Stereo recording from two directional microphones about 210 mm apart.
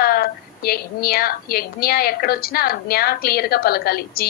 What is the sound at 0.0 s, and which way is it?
A woman's voice, 45° left (ahead or behind).